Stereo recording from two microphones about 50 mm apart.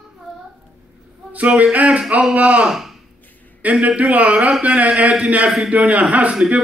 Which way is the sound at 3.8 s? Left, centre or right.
Right.